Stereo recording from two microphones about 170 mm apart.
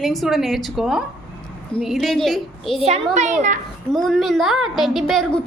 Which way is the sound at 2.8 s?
40° right (ahead or behind).